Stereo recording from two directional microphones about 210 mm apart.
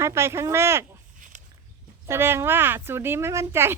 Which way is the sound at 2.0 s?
10° right (ahead or behind).